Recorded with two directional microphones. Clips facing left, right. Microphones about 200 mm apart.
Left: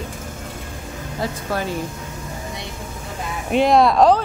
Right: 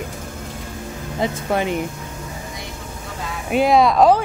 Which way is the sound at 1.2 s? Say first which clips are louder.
Right 4 dB; 20° right (ahead or behind).